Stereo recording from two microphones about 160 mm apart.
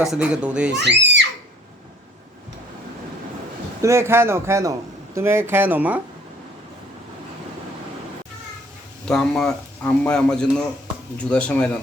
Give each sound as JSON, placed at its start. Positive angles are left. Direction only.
{"t": 0.0, "sound": "speech", "side_deg": -5}
{"t": 0.8, "sound": "speech", "side_deg": -90}
{"t": 3.8, "sound": "speech", "side_deg": -15}
{"t": 9.0, "sound": "a man's voice", "side_deg": 5}